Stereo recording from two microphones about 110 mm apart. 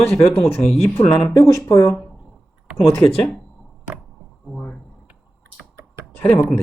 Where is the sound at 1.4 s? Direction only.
30° left (ahead or behind).